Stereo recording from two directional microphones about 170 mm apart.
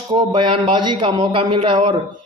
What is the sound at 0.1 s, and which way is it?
A man's voice, 25° right (ahead or behind).